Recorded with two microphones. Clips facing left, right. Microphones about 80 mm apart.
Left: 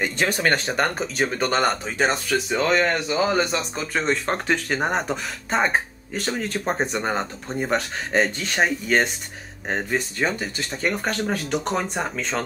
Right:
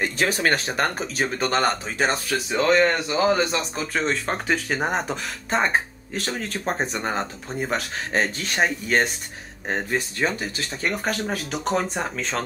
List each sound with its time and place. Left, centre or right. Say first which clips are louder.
0.0 s speech: even; centre